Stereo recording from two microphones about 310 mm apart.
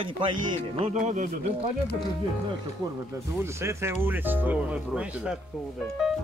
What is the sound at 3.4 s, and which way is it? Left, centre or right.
Speech, centre.